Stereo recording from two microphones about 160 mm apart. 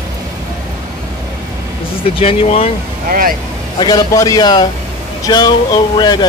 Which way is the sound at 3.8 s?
25° left (ahead or behind).